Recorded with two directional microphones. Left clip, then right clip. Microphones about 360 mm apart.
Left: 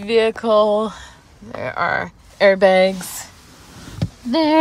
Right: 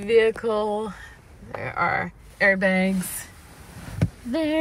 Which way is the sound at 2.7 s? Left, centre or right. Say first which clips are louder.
Left 10 dB; left.